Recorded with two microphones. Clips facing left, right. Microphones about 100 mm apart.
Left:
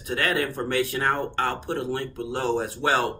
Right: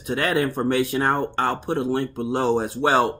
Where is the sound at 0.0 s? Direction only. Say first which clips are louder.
Right 4 dB; 20° right (ahead or behind).